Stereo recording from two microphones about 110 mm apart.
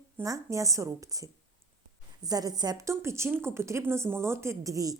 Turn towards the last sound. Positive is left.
turn(degrees=-30)  # may be behind; listen again after turning